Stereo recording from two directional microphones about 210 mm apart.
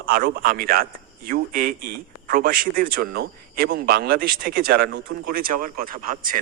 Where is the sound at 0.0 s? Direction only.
45° right (ahead or behind).